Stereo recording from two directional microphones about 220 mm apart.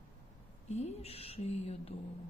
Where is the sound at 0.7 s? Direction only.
30° left (ahead or behind).